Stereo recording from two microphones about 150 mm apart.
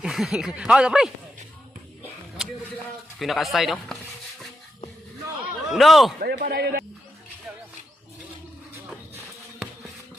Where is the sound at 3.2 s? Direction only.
Centre (ahead or behind).